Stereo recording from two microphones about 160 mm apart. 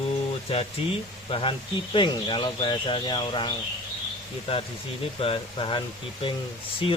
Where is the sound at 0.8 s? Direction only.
35° left (ahead or behind).